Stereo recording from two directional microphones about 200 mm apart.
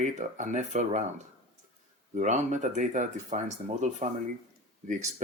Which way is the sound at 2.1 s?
35° right (ahead or behind).